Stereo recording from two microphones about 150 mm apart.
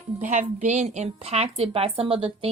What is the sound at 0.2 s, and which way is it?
Speech, 55° right (ahead or behind).